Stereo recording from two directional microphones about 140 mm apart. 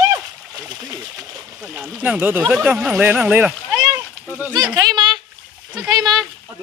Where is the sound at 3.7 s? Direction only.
25° right (ahead or behind).